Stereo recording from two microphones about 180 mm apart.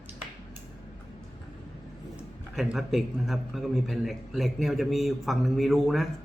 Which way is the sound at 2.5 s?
Centre (ahead or behind).